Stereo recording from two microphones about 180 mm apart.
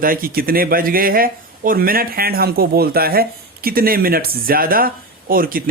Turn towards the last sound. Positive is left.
turn(degrees=-50)  # may be behind; listen again after turning